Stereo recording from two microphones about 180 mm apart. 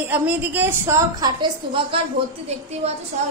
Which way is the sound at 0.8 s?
25° right (ahead or behind).